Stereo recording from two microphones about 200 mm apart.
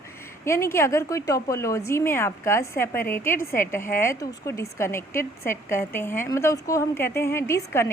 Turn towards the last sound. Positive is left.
turn(degrees=15)  # may be behind; listen again after turning